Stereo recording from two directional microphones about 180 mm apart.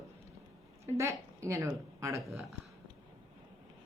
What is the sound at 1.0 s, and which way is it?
Speech, 15° right (ahead or behind).